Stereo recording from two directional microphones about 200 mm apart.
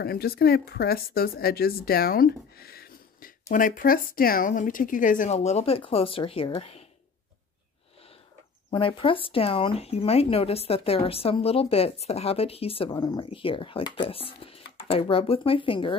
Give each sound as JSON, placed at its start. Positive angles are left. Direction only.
{"t": 0.0, "sound": "speech", "side_deg": 50}
{"t": 8.6, "sound": "speech", "side_deg": 25}